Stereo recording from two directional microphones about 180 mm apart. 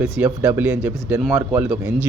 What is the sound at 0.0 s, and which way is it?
Speech, 5° right (ahead or behind).